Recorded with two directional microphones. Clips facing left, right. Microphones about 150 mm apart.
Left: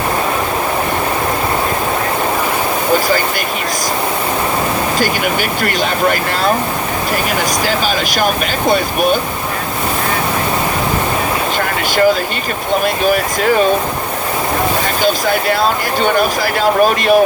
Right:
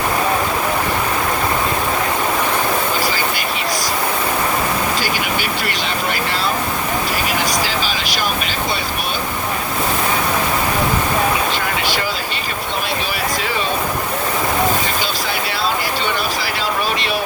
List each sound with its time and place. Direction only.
4.9 s speech: 50° left (ahead or behind)
7.9 s speech: 50° left (ahead or behind)
13.1 s speech: 50° left (ahead or behind)
15.0 s speech: 50° left (ahead or behind)